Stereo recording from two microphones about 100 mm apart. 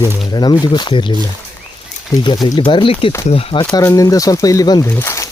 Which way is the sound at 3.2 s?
75° left (ahead or behind).